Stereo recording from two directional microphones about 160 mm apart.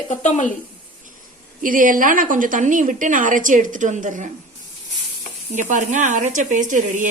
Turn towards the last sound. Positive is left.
turn(degrees=-50)  # may be behind; listen again after turning